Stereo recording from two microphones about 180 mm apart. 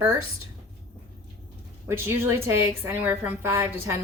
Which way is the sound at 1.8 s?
15° right (ahead or behind).